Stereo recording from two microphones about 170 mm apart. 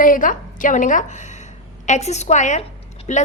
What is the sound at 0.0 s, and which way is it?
A woman's voice, 50° left (ahead or behind).